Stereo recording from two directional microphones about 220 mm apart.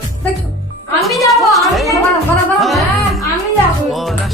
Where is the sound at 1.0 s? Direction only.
Centre (ahead or behind).